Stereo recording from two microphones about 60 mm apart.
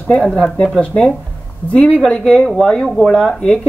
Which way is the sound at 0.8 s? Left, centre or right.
Centre.